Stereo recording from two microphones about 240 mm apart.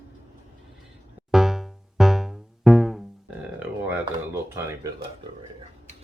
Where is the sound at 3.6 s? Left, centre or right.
Centre.